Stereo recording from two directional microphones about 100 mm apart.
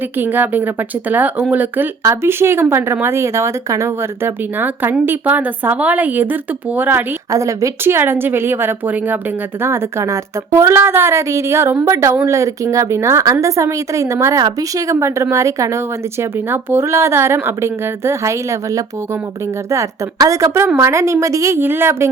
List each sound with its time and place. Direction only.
0.2 s a woman's voice: 20° right (ahead or behind)
7.3 s a woman's voice: 30° right (ahead or behind)